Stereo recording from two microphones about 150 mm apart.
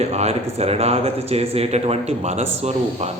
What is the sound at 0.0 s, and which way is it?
Speech, 45° right (ahead or behind).